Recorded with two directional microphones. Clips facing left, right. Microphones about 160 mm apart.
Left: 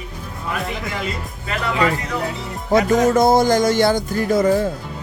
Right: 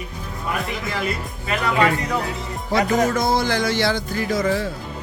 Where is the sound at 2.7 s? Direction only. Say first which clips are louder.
Left 4 dB; 50° left (ahead or behind).